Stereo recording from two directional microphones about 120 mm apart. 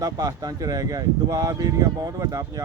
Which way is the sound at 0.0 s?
30° right (ahead or behind).